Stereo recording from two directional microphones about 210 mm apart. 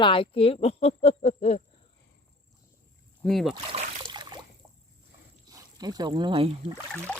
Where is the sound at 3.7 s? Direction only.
25° right (ahead or behind).